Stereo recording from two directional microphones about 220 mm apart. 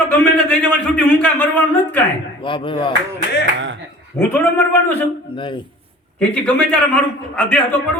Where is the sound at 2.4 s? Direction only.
20° left (ahead or behind).